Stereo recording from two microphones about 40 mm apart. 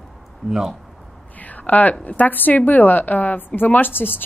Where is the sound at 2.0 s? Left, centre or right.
Left.